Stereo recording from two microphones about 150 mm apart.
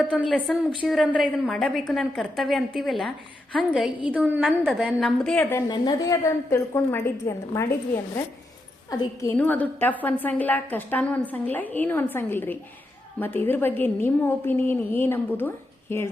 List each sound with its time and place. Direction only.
0.1 s a woman's voice: 5° right (ahead or behind)
5.4 s a woman's voice: 20° left (ahead or behind)
5.7 s a woman's voice: 30° left (ahead or behind)
6.2 s a woman's voice: 20° left (ahead or behind)
8.9 s a woman's voice: 25° left (ahead or behind)
9.3 s a woman's voice: 10° left (ahead or behind)